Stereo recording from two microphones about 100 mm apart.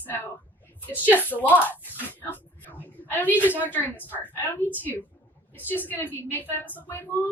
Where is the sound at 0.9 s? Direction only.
20° right (ahead or behind).